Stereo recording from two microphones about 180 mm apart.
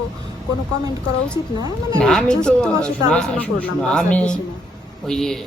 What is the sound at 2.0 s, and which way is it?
Speech, 5° left (ahead or behind).